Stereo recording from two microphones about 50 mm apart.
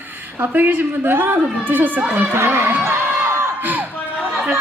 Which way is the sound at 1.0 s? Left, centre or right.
Right.